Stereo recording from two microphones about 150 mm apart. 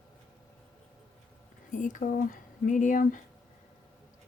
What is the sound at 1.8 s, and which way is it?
Speech, 60° left (ahead or behind).